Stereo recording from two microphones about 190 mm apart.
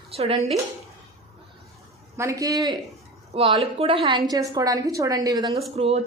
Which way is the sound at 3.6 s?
30° right (ahead or behind).